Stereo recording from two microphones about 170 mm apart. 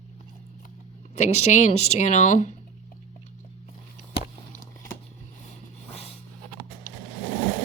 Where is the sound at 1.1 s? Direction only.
40° left (ahead or behind).